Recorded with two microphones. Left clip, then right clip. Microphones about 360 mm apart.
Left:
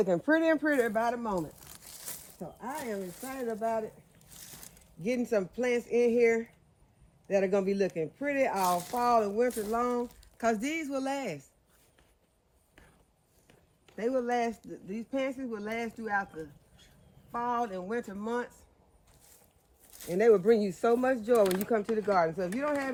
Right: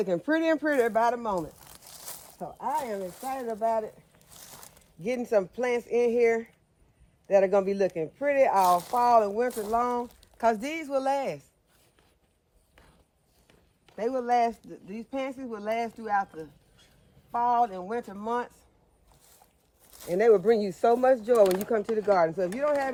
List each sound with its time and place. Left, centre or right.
0.0 s speech: centre
13.5 s speech: centre
19.8 s speech: centre